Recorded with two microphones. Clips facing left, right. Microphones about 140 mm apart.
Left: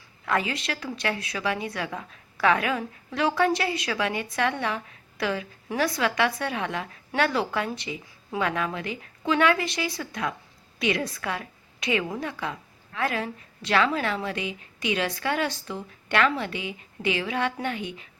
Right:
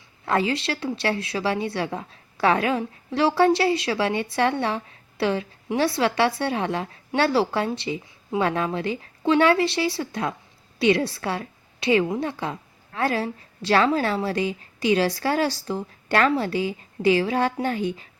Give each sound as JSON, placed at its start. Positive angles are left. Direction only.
{"t": 0.3, "sound": "a woman's voice", "side_deg": -30}